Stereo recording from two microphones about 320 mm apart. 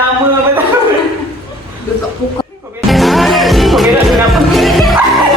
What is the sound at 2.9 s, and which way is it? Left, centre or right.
Music, centre.